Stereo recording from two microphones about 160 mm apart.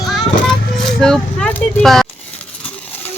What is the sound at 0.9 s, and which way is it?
Speech, 5° left (ahead or behind).